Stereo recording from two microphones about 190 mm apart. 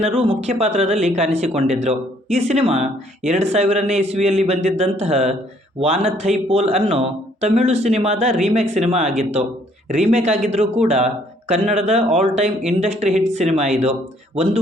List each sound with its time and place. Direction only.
0.0 s speech: 30° right (ahead or behind)